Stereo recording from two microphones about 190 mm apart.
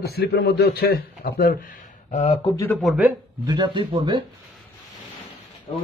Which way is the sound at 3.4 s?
25° right (ahead or behind).